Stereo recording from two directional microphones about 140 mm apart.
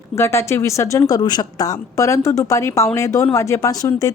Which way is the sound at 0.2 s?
20° left (ahead or behind).